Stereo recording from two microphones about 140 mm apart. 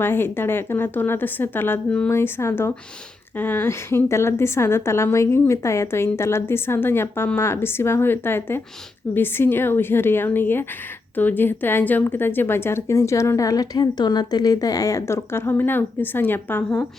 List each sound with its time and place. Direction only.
0.0 s a woman's voice: 15° left (ahead or behind)